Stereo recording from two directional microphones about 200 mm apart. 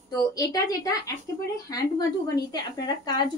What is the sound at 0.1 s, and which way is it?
A woman's voice, 20° left (ahead or behind).